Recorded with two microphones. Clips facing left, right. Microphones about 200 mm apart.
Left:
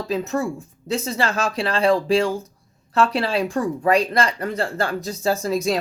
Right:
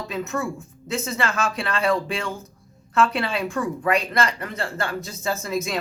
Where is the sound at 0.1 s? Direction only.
35° left (ahead or behind).